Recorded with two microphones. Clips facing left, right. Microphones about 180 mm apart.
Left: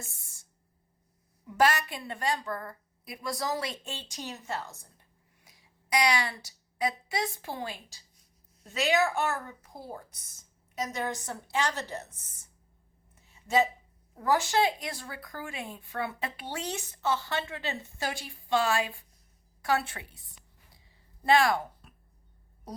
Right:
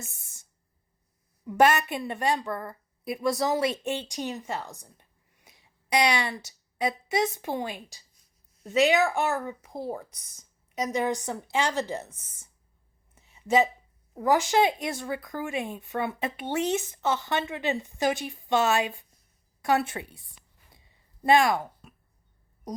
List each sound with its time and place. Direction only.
1.5 s a woman's voice: 25° right (ahead or behind)
14.2 s speech: 15° right (ahead or behind)
21.2 s speech: 20° right (ahead or behind)